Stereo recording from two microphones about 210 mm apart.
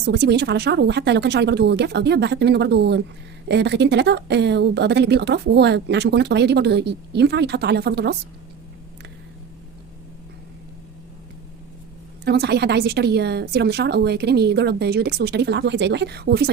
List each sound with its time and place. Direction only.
0.0 s speech: 55° right (ahead or behind)
12.2 s speech: 50° right (ahead or behind)